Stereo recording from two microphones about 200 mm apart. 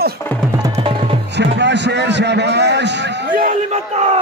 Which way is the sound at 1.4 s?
60° right (ahead or behind).